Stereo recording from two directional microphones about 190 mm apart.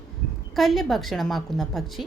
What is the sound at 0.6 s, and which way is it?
A woman's voice, centre (ahead or behind).